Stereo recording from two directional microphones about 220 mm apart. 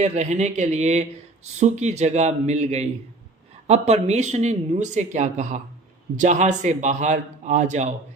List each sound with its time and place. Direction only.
0.0 s speech: 30° right (ahead or behind)